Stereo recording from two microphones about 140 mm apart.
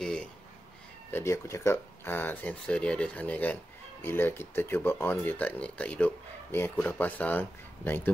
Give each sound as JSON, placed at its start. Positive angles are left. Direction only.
{"t": 1.1, "sound": "speech", "side_deg": 20}